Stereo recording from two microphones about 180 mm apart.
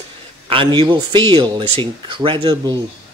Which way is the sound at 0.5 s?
25° right (ahead or behind).